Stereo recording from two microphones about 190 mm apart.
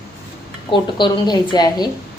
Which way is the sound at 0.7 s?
25° left (ahead or behind).